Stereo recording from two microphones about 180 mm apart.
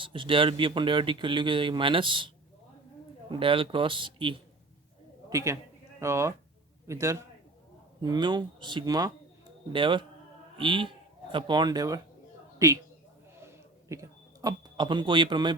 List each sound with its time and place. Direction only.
0.0 s a man's voice: 30° right (ahead or behind)
3.3 s a man's voice: 30° right (ahead or behind)
5.3 s a man's voice: 15° right (ahead or behind)
13.4 s a sound: 15° right (ahead or behind)